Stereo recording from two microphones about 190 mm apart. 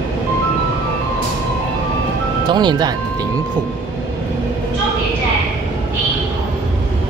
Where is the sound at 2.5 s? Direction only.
25° right (ahead or behind).